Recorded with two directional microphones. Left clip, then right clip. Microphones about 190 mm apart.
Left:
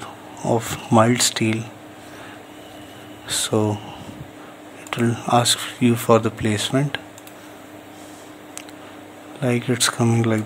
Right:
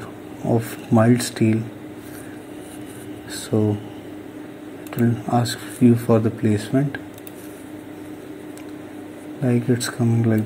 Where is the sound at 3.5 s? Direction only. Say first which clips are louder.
Right 1 dB; 30° left (ahead or behind).